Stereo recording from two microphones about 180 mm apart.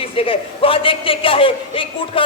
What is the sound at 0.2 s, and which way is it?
A woman's voice, 30° left (ahead or behind).